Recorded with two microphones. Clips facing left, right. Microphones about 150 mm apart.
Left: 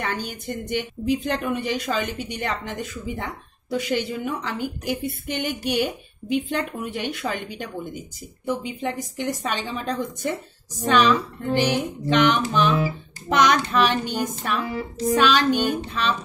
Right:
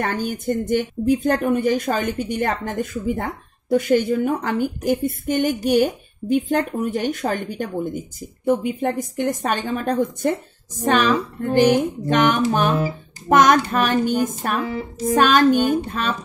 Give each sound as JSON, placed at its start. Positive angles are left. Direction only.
{"t": 0.0, "sound": "speech", "side_deg": -45}